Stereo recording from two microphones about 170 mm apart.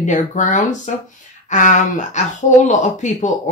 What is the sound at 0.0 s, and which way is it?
Speech, 45° left (ahead or behind).